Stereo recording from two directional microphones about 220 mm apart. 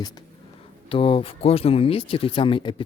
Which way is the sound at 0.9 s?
25° left (ahead or behind).